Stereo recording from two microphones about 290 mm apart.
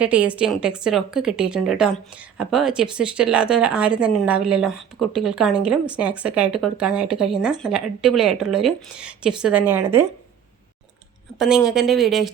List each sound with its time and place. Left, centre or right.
0.0 s a woman's voice: centre
11.3 s a woman's voice: centre